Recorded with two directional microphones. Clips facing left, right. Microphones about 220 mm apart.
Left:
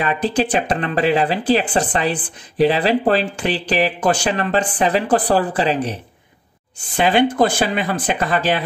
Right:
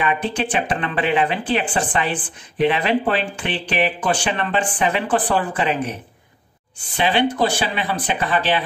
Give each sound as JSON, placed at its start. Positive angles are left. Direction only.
{"t": 0.0, "sound": "speech", "side_deg": 35}
{"t": 7.0, "sound": "speech", "side_deg": 45}